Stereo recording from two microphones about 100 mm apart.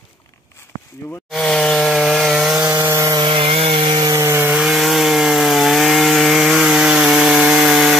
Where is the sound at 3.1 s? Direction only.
60° right (ahead or behind).